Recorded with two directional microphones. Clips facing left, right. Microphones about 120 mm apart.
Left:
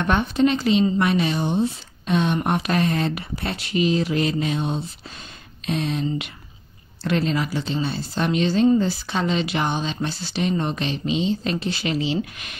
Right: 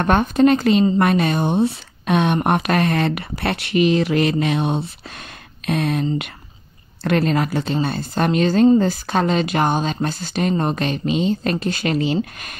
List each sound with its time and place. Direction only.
0.0 s speech: 45° right (ahead or behind); by 4.8 s 70° right (ahead or behind)
5.7 s speech: 55° right (ahead or behind)